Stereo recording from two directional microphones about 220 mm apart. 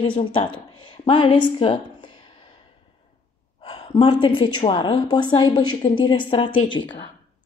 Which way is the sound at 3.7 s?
25° left (ahead or behind).